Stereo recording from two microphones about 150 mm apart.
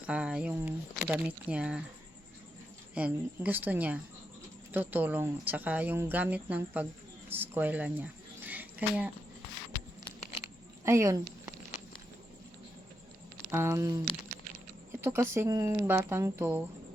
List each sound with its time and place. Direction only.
0.0 s speech: 10° right (ahead or behind)
2.9 s speech: 10° right (ahead or behind)
7.3 s a sound: 15° right (ahead or behind)
10.8 s speech: 20° right (ahead or behind)
13.5 s speech: 15° right (ahead or behind)
15.0 s speech: 15° right (ahead or behind)